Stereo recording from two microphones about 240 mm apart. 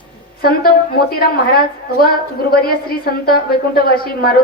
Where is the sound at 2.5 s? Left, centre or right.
Left.